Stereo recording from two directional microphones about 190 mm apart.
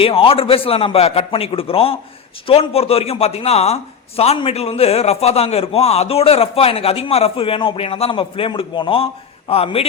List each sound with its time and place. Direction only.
0.0 s a man's voice: 30° left (ahead or behind)